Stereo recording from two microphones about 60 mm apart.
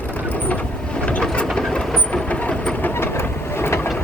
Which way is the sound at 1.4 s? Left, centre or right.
Centre.